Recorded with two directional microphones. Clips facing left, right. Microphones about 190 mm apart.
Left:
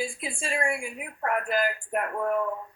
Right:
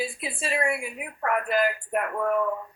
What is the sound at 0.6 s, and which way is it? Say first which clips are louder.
A woman's voice: right 1 dB; 30° left (ahead or behind).